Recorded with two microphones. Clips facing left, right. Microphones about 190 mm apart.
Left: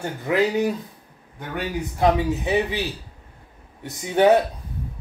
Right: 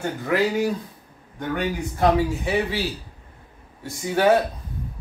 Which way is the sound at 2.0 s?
20° left (ahead or behind).